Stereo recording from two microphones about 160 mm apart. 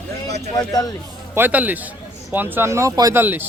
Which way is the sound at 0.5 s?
25° left (ahead or behind).